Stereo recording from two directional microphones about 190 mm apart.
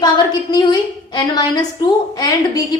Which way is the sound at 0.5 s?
20° left (ahead or behind).